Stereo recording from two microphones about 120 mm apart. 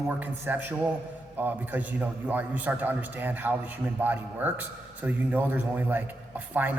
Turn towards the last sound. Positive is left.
turn(degrees=-15)  # may be behind; listen again after turning